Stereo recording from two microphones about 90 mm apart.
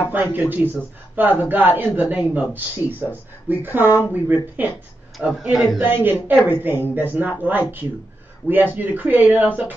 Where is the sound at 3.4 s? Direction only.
20° right (ahead or behind).